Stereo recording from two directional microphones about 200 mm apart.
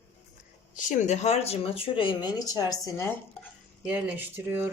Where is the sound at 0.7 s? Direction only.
40° left (ahead or behind); by 3.4 s 10° left (ahead or behind).